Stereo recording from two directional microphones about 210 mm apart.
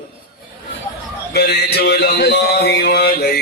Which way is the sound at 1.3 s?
50° left (ahead or behind).